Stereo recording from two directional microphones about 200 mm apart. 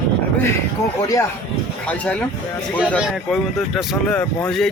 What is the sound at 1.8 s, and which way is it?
Speech, 5° left (ahead or behind).